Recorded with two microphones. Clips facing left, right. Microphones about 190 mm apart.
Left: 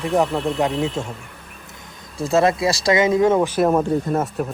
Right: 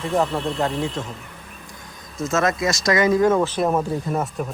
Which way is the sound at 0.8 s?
20° left (ahead or behind).